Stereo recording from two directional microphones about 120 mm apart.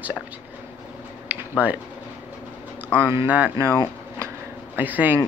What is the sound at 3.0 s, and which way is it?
Speech, 15° right (ahead or behind).